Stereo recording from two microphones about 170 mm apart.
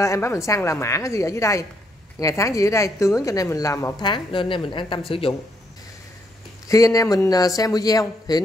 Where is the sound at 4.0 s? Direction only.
30° left (ahead or behind).